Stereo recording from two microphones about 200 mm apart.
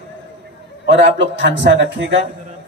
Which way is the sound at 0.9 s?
60° right (ahead or behind).